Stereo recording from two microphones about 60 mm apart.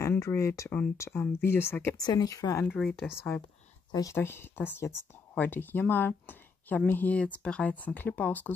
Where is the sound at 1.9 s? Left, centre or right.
Left.